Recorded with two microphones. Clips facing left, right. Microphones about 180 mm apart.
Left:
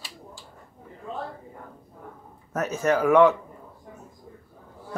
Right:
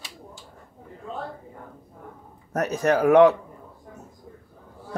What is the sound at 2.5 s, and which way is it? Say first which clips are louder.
Speech: right 2 dB; 35° right (ahead or behind).